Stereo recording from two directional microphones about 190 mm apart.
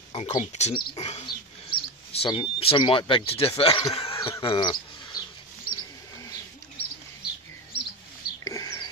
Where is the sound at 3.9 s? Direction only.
30° left (ahead or behind).